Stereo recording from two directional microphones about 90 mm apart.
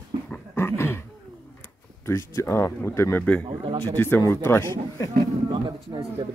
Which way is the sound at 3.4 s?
75° right (ahead or behind).